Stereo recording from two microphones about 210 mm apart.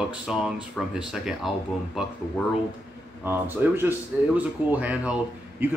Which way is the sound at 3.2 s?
10° right (ahead or behind).